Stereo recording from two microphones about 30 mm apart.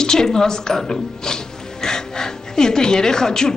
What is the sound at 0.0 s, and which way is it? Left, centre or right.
Zipper, left.